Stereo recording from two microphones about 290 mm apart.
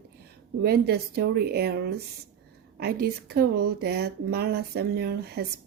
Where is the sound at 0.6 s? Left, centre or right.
Right.